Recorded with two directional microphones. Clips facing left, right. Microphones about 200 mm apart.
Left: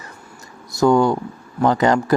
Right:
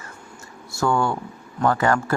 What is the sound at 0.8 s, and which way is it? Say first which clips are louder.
Speech: left 7 dB; 15° left (ahead or behind).